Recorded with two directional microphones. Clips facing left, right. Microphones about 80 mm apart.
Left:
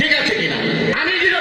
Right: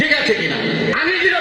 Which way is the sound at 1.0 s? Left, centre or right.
Centre.